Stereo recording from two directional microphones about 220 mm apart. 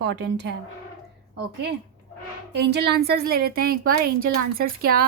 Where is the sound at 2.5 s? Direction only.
50° right (ahead or behind).